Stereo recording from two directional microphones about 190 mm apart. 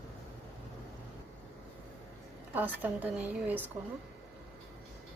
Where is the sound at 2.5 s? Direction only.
10° right (ahead or behind).